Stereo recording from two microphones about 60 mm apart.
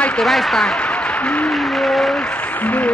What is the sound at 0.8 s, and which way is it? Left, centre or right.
Applause, centre.